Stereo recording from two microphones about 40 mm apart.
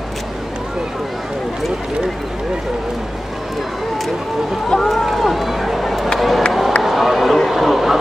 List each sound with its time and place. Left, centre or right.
4.6 s run: centre
5.0 s run: centre
7.4 s a sound: centre